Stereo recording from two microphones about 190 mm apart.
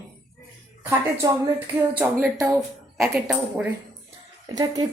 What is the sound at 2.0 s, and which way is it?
A woman's voice, 10° right (ahead or behind).